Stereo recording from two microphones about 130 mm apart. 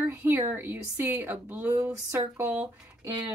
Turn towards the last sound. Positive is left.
turn(degrees=-15)  # may be behind; listen again after turning